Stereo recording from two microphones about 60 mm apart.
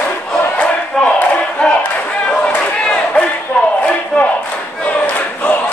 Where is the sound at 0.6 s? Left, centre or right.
Left.